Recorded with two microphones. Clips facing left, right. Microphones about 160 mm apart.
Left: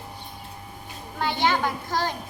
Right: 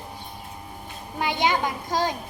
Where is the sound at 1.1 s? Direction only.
15° right (ahead or behind).